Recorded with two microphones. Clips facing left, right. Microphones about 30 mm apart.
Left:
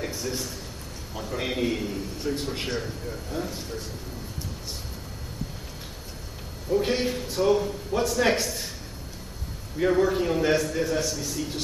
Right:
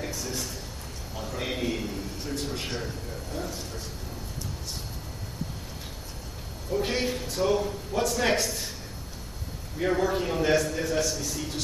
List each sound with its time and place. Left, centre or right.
0.0 s a sound: centre
1.3 s a man's voice: centre
3.3 s speech: centre
6.7 s a man's voice: centre
9.8 s a man's voice: centre